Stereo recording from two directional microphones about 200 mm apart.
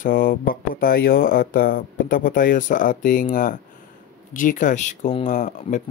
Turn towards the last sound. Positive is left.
turn(degrees=40)  # may be behind; listen again after turning